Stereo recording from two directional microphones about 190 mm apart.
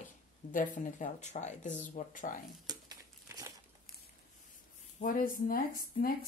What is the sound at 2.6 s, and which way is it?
Crumpling, 20° right (ahead or behind).